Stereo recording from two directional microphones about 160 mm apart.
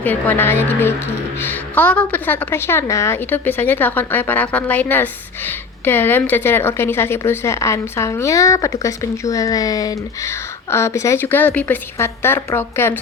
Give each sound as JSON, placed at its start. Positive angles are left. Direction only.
{"t": 0.0, "sound": "a woman's voice", "side_deg": 10}